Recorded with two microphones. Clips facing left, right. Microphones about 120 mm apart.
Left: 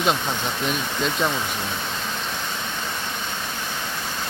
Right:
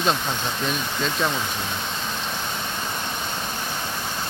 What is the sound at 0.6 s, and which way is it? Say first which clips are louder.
Speech: left 1 dB; 15° left (ahead or behind).